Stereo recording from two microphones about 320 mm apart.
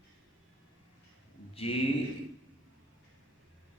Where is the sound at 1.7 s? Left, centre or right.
Centre.